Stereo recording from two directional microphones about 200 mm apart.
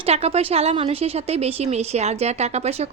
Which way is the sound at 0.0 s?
30° right (ahead or behind).